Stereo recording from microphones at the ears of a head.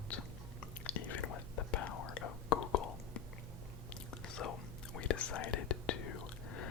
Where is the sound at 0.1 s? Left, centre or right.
Left.